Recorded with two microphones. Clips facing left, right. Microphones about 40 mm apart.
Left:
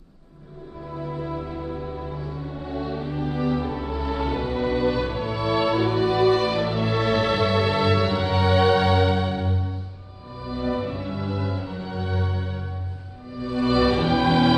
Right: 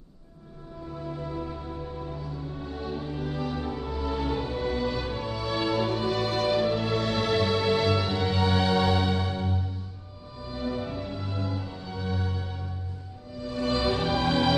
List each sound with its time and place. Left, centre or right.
0.9 s music: left